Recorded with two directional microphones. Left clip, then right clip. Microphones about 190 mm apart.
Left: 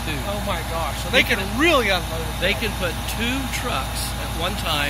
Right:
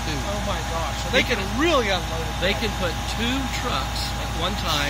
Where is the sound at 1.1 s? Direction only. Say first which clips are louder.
Left 3 dB; 20° left (ahead or behind).